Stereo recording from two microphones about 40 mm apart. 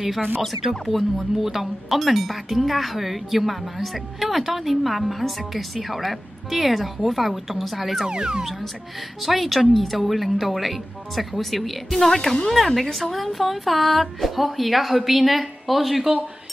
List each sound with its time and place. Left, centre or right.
0.4 s speech: centre
8.1 s speech: centre
9.2 s speech: centre